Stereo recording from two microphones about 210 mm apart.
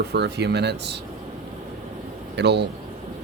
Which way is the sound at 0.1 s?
50° right (ahead or behind).